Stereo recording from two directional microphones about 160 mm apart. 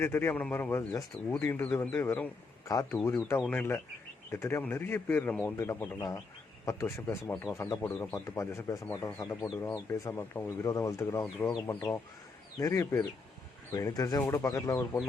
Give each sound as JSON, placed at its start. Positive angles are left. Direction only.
{"t": 0.0, "sound": "speech", "side_deg": 15}